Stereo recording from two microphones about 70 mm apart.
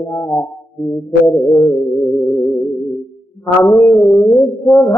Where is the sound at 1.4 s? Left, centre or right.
Left.